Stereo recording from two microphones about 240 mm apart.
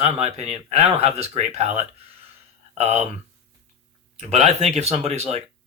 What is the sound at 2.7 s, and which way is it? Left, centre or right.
Speech, right.